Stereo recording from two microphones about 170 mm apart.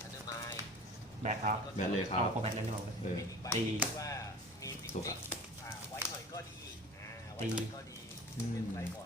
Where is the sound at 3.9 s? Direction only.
20° left (ahead or behind).